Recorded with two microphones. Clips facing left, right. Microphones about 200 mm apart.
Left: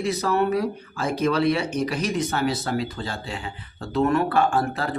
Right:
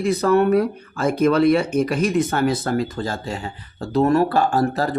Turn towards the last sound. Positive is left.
turn(degrees=-40)  # may be behind; listen again after turning